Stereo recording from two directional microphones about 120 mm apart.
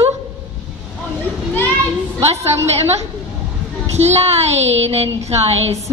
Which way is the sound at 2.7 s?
60° right (ahead or behind).